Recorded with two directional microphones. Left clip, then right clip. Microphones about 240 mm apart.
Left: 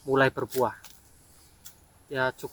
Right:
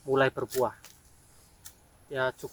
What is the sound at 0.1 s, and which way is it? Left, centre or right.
Speech, centre.